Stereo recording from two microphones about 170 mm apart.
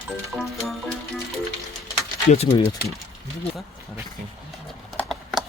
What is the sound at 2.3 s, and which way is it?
Speech, 35° left (ahead or behind).